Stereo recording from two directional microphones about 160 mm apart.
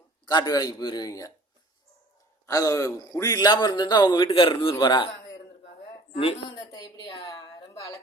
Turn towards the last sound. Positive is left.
turn(degrees=30)  # may be behind; listen again after turning